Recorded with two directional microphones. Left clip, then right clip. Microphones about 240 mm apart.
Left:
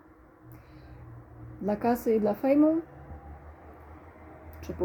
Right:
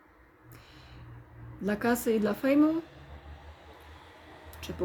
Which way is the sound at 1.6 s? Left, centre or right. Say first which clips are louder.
Left 2 dB; centre.